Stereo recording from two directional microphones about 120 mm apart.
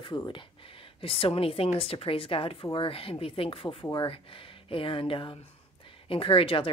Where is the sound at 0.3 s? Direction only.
45° left (ahead or behind).